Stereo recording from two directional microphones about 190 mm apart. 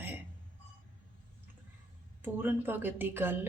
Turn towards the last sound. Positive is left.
turn(degrees=-10)  # may be behind; listen again after turning